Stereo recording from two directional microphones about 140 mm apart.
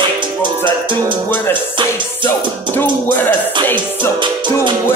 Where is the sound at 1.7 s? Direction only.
35° right (ahead or behind).